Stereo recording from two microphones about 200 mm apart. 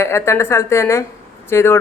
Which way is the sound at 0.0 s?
15° left (ahead or behind).